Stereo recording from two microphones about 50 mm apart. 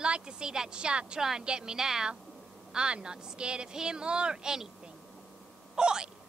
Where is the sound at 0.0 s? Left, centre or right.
Centre.